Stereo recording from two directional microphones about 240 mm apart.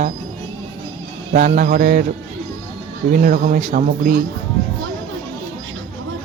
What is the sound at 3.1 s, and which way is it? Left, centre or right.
Speech, right.